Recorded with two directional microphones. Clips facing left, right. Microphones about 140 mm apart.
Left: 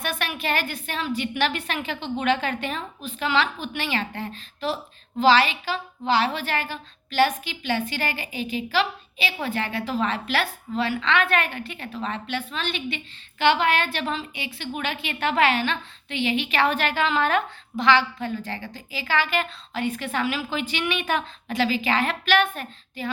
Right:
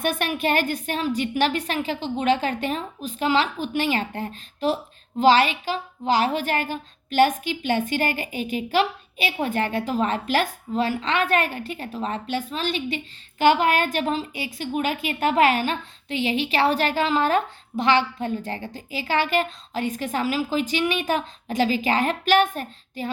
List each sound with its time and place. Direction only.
0.0 s a woman's voice: 45° right (ahead or behind)